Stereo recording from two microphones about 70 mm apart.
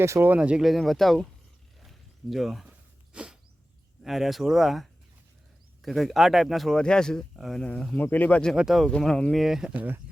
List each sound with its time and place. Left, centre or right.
0.0 s speech: right
0.3 s speech: centre
0.6 s speech: centre
1.8 s a sound: centre
2.6 s a sound: centre
4.0 s speech: centre
7.9 s speech: left
8.5 s speech: centre
9.0 s speech: centre
9.3 s speech: centre
9.7 s speech: right